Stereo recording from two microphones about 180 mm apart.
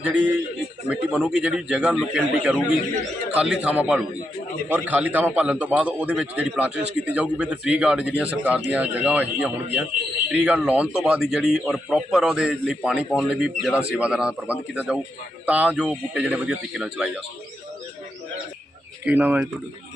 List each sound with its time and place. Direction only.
0.0 s a man's voice: 10° right (ahead or behind)
19.0 s a man's voice: 10° right (ahead or behind)